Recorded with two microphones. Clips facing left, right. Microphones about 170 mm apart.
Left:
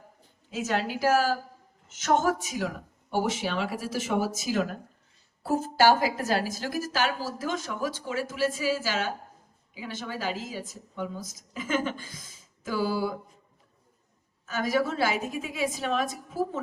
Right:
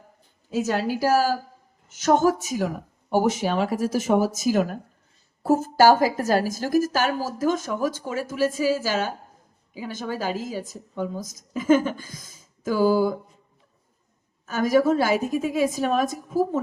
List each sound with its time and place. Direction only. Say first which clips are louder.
0.5 s a woman's voice: right 5 dB; 40° right (ahead or behind)
14.4 s a woman's voice: right 7 dB; 45° right (ahead or behind)